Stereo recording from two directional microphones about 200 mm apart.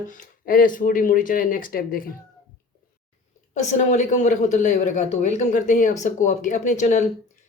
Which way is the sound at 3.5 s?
35° left (ahead or behind).